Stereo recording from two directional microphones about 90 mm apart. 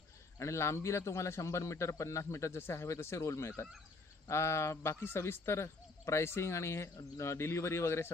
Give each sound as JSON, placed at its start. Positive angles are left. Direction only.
{"t": 0.4, "sound": "a man's voice", "side_deg": 30}